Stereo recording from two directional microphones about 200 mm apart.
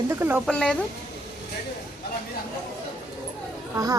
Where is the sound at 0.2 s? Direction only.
10° right (ahead or behind).